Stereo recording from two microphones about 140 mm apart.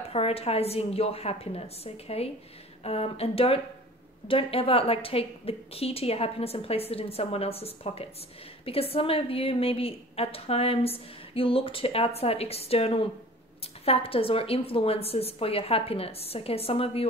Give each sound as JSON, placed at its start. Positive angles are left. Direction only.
{"t": 0.1, "sound": "a woman's voice", "side_deg": 45}